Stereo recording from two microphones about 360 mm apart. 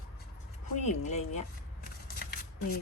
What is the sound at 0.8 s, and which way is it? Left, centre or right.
Speech, centre.